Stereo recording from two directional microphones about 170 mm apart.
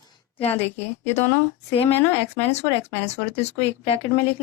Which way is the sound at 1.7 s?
35° left (ahead or behind).